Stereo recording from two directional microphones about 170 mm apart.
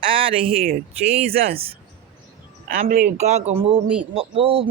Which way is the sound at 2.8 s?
50° right (ahead or behind).